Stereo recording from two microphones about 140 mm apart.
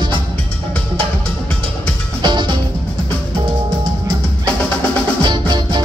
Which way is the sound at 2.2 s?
35° right (ahead or behind).